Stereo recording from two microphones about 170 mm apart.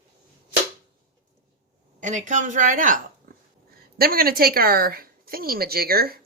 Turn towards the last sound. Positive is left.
turn(degrees=-65)  # may be behind; listen again after turning